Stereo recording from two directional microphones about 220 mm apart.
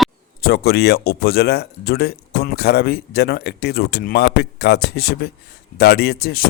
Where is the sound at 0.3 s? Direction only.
45° left (ahead or behind).